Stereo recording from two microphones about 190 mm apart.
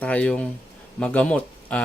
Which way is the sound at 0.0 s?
5° left (ahead or behind).